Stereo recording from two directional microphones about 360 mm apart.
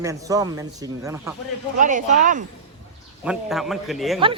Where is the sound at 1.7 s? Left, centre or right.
Right.